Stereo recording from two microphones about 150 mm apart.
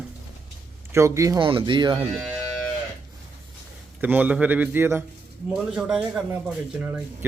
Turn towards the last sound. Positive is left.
turn(degrees=-10)  # may be behind; listen again after turning